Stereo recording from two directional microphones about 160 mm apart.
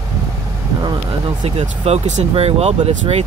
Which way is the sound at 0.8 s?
30° right (ahead or behind).